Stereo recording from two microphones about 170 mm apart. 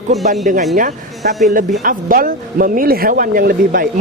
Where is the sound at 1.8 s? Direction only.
55° right (ahead or behind).